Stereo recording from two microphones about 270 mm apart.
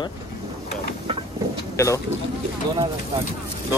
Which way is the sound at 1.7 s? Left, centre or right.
Centre.